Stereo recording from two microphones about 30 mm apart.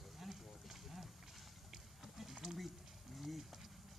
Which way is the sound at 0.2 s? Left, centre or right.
Centre.